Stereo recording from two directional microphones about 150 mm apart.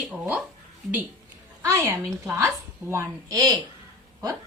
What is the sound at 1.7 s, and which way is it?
A woman's voice, 20° right (ahead or behind).